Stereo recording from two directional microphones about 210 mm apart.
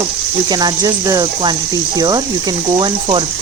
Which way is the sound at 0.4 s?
20° right (ahead or behind).